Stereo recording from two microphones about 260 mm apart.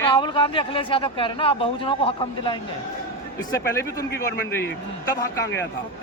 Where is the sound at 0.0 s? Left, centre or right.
Centre.